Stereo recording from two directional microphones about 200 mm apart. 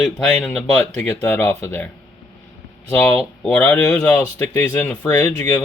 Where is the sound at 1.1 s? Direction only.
15° left (ahead or behind).